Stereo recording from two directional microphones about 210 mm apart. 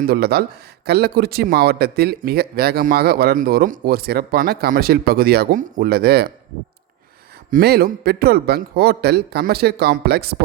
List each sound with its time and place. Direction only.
0.1 s speech: 50° right (ahead or behind)
7.5 s speech: 50° right (ahead or behind)